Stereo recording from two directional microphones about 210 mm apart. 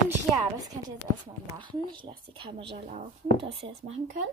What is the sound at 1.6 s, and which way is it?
Speech, 20° right (ahead or behind).